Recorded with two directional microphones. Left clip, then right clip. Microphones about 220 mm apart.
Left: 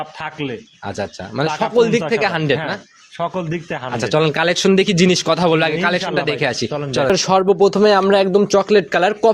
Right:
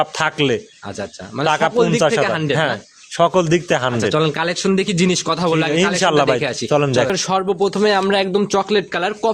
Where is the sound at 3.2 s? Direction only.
55° right (ahead or behind).